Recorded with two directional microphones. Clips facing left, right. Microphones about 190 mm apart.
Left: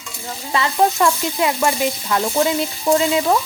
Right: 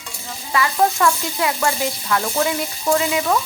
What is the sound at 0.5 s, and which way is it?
Stir, 20° left (ahead or behind).